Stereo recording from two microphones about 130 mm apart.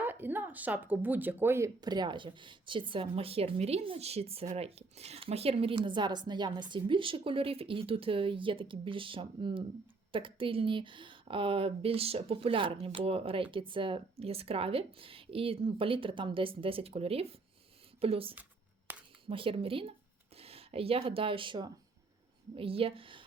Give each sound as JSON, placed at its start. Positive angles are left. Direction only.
{"t": 0.0, "sound": "speech", "side_deg": -15}
{"t": 1.8, "sound": "speech", "side_deg": -35}
{"t": 18.9, "sound": "a sound", "side_deg": -15}
{"t": 19.3, "sound": "speech", "side_deg": -45}